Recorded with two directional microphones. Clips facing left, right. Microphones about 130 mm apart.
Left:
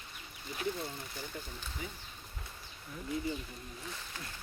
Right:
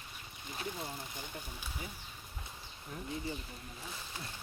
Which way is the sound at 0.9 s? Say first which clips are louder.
Left 1 dB; 15° right (ahead or behind).